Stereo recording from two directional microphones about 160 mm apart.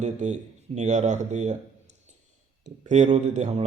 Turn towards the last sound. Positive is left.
turn(degrees=-45)  # may be behind; listen again after turning